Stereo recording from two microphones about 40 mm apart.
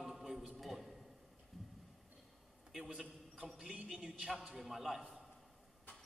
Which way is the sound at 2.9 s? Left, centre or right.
Centre.